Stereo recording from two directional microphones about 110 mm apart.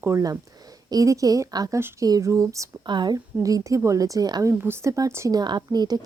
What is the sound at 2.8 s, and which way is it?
Speech, 40° right (ahead or behind).